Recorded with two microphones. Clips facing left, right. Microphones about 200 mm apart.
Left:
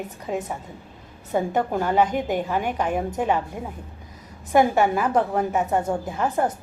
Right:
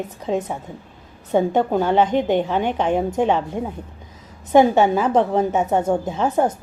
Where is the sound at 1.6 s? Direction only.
25° right (ahead or behind).